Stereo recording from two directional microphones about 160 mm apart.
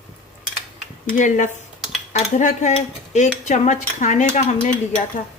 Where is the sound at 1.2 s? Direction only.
50° left (ahead or behind).